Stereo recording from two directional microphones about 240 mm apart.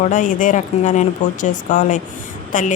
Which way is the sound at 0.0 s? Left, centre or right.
Left.